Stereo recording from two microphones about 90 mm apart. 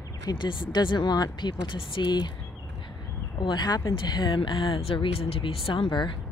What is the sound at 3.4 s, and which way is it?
Speech, 55° left (ahead or behind).